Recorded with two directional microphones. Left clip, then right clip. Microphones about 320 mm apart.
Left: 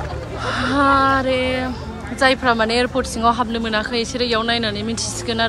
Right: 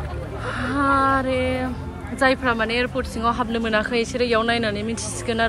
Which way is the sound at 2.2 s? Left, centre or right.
Centre.